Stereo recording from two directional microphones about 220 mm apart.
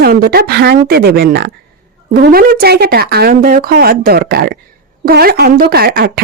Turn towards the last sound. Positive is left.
turn(degrees=-45)  # may be behind; listen again after turning